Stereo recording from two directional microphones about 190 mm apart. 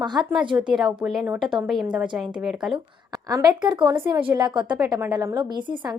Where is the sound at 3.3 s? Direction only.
20° right (ahead or behind).